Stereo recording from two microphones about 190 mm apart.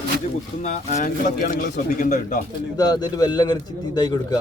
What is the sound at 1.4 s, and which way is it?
Speech, 50° left (ahead or behind).